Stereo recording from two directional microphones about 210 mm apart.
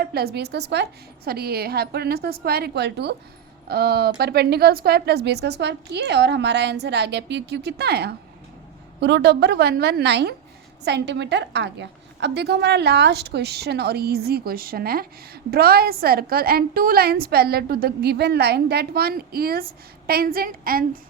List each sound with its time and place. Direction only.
0.0 s a woman's voice: 50° right (ahead or behind)